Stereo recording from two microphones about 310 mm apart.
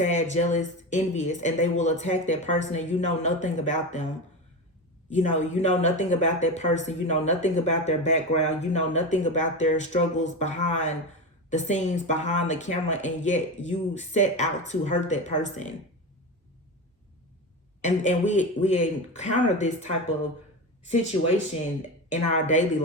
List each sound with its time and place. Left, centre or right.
0.0 s speech: left
5.1 s speech: left
17.8 s speech: left
22.1 s speech: left